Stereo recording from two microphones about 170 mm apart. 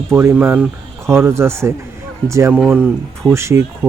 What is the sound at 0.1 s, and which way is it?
Speech, 15° right (ahead or behind).